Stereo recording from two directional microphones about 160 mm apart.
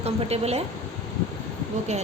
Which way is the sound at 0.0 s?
40° right (ahead or behind).